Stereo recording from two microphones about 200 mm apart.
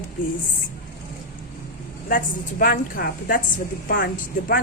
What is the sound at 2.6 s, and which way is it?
Speech, 45° left (ahead or behind).